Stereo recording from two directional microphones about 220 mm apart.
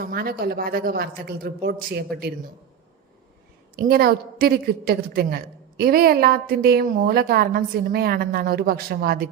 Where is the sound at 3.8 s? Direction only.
45° right (ahead or behind).